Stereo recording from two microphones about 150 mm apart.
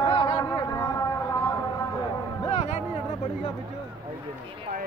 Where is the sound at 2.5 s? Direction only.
45° left (ahead or behind).